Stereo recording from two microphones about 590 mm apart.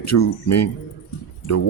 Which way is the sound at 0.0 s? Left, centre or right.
Left.